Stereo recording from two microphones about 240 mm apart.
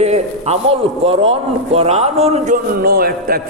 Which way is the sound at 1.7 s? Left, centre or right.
Right.